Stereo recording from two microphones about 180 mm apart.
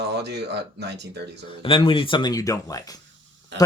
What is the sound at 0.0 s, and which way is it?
Speech, 70° right (ahead or behind).